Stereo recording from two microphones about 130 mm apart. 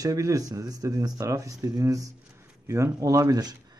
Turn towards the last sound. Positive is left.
turn(degrees=-30)  # may be behind; listen again after turning